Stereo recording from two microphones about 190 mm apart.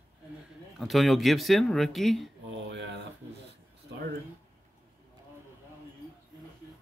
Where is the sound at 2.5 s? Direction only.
65° right (ahead or behind).